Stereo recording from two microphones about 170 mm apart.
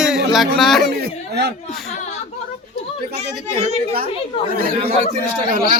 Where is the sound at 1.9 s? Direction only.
40° left (ahead or behind).